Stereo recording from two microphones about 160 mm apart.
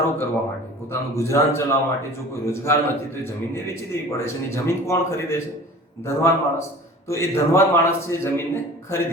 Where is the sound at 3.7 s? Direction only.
15° left (ahead or behind).